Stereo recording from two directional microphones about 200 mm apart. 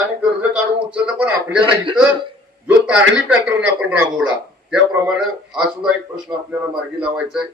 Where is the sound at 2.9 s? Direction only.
5° right (ahead or behind).